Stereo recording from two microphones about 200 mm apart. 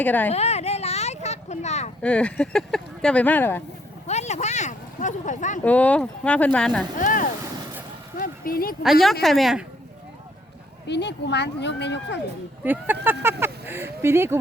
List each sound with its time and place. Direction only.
0.0 s speech: 10° left (ahead or behind)
0.3 s a sound: 30° left (ahead or behind)
2.0 s speech: 5° left (ahead or behind)
4.0 s a sound: 35° left (ahead or behind)
5.6 s speech: 5° left (ahead or behind)
7.0 s speech: 40° left (ahead or behind)
8.2 s a sound: 45° left (ahead or behind)
8.8 s speech: centre (ahead or behind)
10.8 s speech: 60° left (ahead or behind)
12.6 s speech: 10° right (ahead or behind)